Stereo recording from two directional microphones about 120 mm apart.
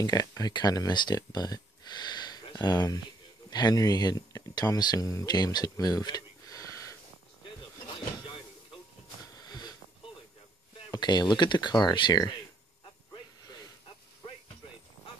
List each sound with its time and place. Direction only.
0.0 s speech: 30° left (ahead or behind)
9.3 s wheeze: 35° left (ahead or behind)
10.9 s speech: 35° left (ahead or behind)